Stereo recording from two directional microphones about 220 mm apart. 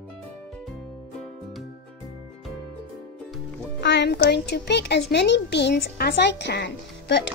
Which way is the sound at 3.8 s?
50° left (ahead or behind).